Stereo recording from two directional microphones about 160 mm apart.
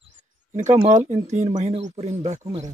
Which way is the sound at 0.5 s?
50° right (ahead or behind).